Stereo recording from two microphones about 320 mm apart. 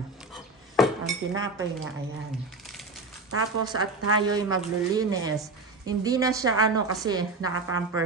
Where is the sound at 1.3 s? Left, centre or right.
Right.